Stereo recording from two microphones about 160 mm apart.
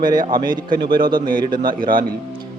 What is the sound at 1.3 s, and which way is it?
Speech, 60° right (ahead or behind).